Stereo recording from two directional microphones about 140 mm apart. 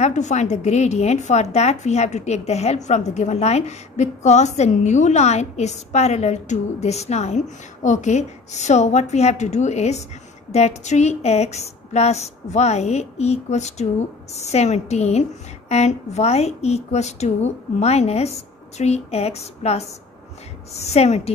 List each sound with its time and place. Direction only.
0.0 s a woman's voice: 55° left (ahead or behind)